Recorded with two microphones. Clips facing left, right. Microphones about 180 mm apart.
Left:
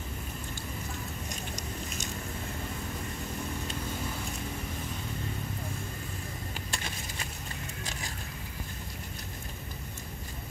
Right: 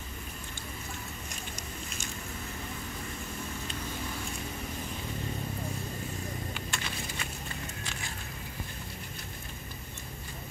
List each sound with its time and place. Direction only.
6.5 s vehicle: 35° left (ahead or behind)